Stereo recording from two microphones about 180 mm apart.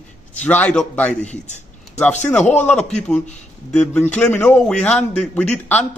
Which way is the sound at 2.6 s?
5° left (ahead or behind).